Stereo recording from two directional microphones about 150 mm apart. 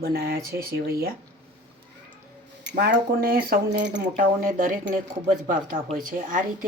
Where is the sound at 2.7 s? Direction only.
90° right.